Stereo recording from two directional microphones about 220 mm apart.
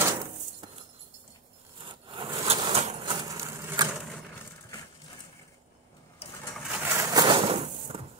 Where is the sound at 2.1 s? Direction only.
20° right (ahead or behind).